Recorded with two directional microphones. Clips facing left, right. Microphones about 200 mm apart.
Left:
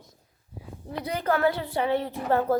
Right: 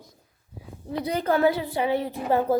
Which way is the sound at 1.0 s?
15° right (ahead or behind).